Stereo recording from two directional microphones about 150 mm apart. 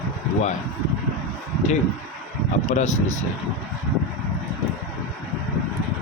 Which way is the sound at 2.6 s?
55° left (ahead or behind).